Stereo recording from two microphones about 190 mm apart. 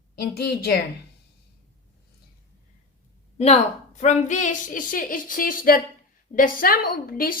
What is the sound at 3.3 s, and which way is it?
A woman's voice, 35° left (ahead or behind).